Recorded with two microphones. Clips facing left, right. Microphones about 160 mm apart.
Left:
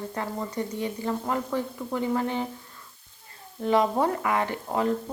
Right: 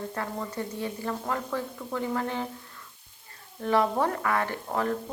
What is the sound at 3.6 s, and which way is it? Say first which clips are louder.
A woman's voice: left 2 dB; 15° left (ahead or behind).